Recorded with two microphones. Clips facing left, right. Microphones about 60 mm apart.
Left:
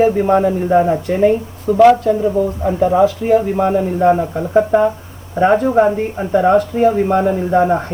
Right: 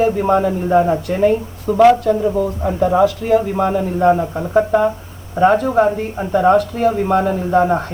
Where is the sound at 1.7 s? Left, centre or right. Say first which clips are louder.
Left 1 dB; centre.